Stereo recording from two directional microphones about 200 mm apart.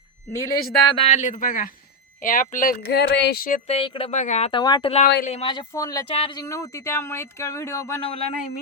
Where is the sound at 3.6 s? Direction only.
30° left (ahead or behind).